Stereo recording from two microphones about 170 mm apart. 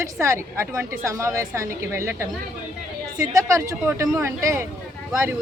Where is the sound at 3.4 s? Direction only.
20° right (ahead or behind).